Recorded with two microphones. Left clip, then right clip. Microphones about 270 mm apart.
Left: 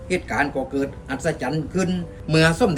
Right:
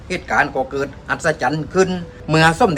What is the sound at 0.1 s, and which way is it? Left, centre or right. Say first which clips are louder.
Speech: right 5 dB; centre.